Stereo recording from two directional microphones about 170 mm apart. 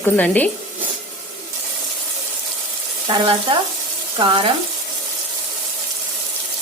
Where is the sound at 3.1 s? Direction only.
30° right (ahead or behind).